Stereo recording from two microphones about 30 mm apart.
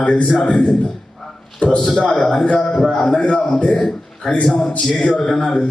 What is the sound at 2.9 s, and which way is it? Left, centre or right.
Speech, centre.